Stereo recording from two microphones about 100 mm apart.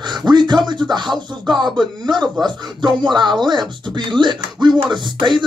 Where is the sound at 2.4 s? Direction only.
50° right (ahead or behind).